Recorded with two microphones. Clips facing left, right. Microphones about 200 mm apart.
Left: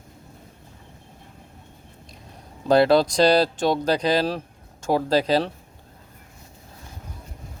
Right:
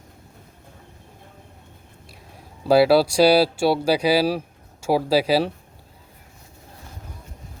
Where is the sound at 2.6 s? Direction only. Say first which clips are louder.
Right 1 dB; 5° right (ahead or behind).